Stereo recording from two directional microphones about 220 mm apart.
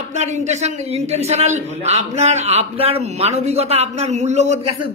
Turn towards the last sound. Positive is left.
turn(degrees=-25)  # may be behind; listen again after turning